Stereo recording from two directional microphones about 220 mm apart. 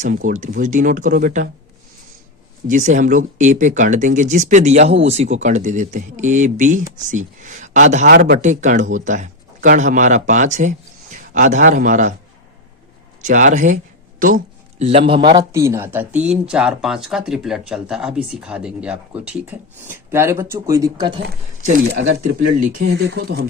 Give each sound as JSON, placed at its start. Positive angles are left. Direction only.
{"t": 0.0, "sound": "speech", "side_deg": -35}
{"t": 2.6, "sound": "speech", "side_deg": -35}
{"t": 8.1, "sound": "speech", "side_deg": -50}
{"t": 8.4, "sound": "speech", "side_deg": -35}
{"t": 13.2, "sound": "speech", "side_deg": -35}
{"t": 21.9, "sound": "speech", "side_deg": -60}
{"t": 22.2, "sound": "speech", "side_deg": -35}